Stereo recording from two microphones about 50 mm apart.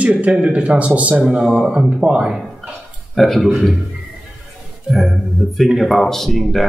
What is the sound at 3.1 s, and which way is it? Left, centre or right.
Speech, centre.